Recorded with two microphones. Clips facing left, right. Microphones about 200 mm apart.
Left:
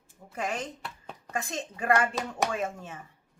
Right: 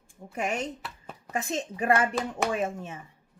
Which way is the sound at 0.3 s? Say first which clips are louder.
Right 3 dB; 20° right (ahead or behind).